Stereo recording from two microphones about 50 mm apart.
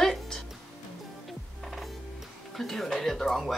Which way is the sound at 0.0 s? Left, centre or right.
Centre.